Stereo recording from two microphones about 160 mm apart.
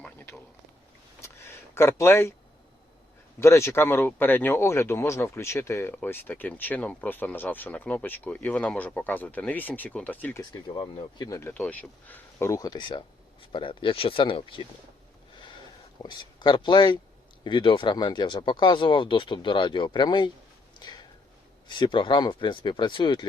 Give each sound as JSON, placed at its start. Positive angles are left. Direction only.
{"t": 0.0, "sound": "a sound", "side_deg": 10}
{"t": 3.4, "sound": "speech", "side_deg": 15}
{"t": 10.5, "sound": "speech", "side_deg": 30}
{"t": 11.3, "sound": "speech", "side_deg": 15}
{"t": 16.0, "sound": "speech", "side_deg": 25}
{"t": 20.7, "sound": "a sound", "side_deg": 25}
{"t": 21.7, "sound": "speech", "side_deg": 30}